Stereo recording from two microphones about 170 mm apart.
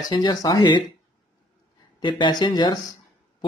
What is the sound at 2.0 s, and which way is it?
Speech, 30° left (ahead or behind).